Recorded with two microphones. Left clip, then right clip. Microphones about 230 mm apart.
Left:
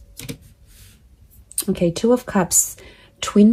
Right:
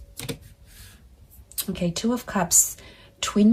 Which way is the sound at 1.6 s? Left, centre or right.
Left.